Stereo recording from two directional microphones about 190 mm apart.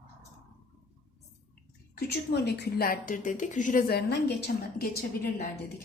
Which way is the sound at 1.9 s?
60° left (ahead or behind).